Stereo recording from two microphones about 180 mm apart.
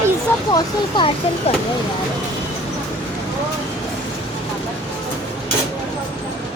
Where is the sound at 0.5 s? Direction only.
25° left (ahead or behind).